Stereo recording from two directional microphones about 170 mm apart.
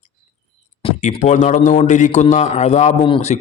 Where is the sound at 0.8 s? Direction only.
40° left (ahead or behind).